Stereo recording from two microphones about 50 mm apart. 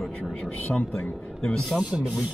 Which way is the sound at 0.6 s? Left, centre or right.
Left.